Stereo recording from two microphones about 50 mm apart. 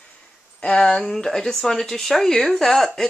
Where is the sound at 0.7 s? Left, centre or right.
Centre.